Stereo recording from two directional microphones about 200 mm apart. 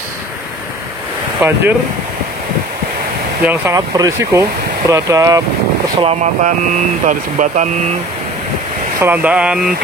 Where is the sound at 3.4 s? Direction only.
15° right (ahead or behind).